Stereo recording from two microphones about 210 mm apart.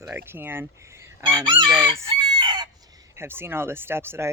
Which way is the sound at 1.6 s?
20° right (ahead or behind).